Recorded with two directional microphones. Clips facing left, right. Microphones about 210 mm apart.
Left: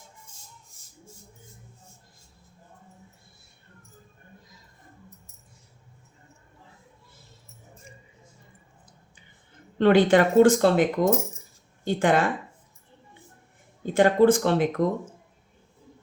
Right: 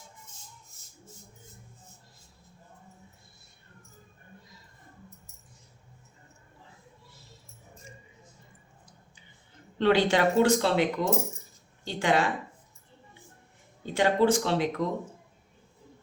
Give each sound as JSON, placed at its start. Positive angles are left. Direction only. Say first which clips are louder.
{"t": 9.7, "sound": "speech", "louder": "left 5 dB", "side_deg": 50}
{"t": 13.8, "sound": "speech", "louder": "left 5 dB", "side_deg": 50}